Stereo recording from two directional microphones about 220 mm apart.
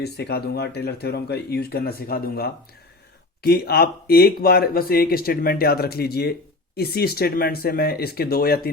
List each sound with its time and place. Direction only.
0.0 s speech: 50° left (ahead or behind)